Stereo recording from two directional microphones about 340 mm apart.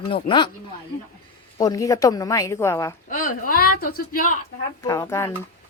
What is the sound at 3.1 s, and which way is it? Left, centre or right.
A woman's voice, left.